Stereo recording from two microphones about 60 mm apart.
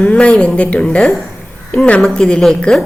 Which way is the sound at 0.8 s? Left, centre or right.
Centre.